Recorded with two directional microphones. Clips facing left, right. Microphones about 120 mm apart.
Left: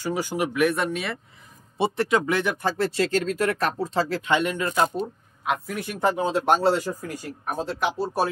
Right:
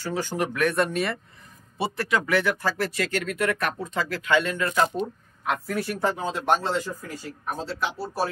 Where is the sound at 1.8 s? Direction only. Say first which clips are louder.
Left 4 dB; 25° left (ahead or behind).